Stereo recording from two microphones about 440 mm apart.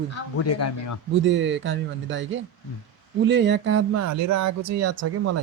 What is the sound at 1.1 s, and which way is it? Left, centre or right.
Speech, right.